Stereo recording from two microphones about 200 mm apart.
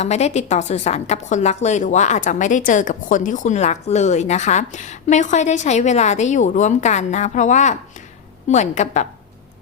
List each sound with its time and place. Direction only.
0.0 s a woman's voice: 35° left (ahead or behind)